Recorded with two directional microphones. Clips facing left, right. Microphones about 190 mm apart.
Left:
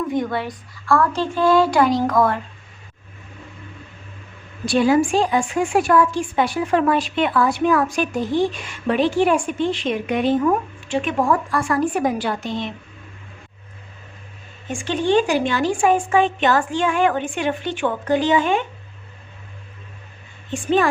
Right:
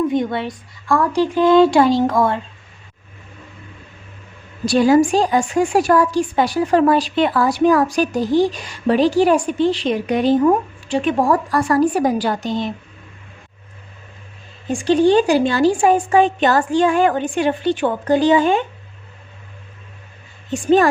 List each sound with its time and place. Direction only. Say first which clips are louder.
0.1 s a woman's voice: right 3 dB; 25° right (ahead or behind)
4.6 s a woman's voice: right 3 dB; 40° right (ahead or behind)
14.7 s a woman's voice: right 6 dB; 35° right (ahead or behind)
20.5 s a woman's voice: right 5 dB; 40° right (ahead or behind)